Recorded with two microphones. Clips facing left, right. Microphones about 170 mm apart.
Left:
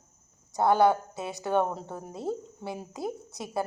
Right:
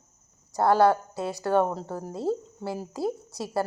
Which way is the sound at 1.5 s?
20° left (ahead or behind).